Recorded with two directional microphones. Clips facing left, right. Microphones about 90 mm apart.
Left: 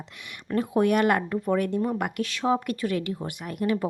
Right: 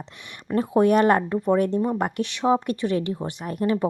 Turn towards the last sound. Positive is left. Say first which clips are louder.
# right 3 dB
turn(degrees=-30)  # may be behind; listen again after turning